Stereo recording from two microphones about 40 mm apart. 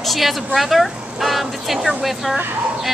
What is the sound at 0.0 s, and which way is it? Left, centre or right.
A woman's voice, centre.